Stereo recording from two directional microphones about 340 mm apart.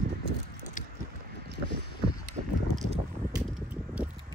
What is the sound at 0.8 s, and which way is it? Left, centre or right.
Squish, left.